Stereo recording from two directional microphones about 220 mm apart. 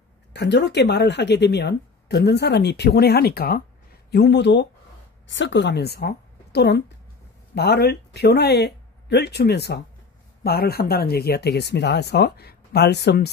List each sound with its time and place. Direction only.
0.3 s a woman's voice: 50° left (ahead or behind)